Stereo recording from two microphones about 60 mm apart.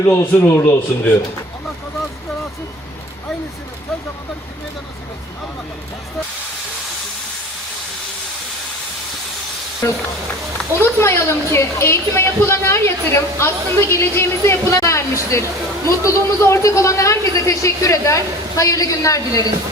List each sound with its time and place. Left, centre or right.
0.0 s speech: left
9.8 s a man's voice: left